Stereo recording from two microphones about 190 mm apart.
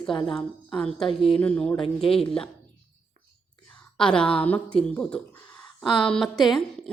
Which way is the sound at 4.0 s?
5° left (ahead or behind).